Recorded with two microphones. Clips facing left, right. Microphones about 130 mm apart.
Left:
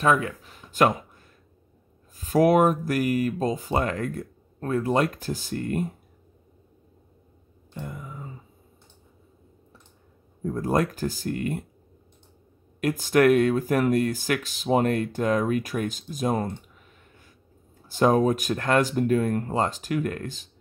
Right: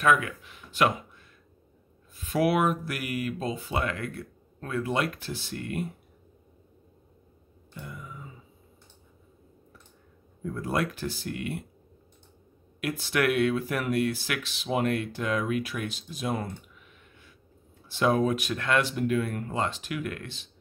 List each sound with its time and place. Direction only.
0.0 s speech: 35° left (ahead or behind)
7.8 s speech: 45° left (ahead or behind)
10.4 s speech: 40° left (ahead or behind)
12.8 s speech: 40° left (ahead or behind)